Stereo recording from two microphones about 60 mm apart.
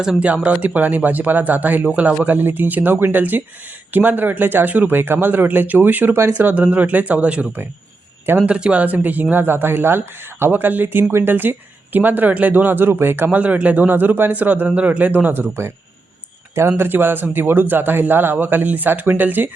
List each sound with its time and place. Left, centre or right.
0.0 s speech: centre; by 13.4 s right
13.4 s speech: right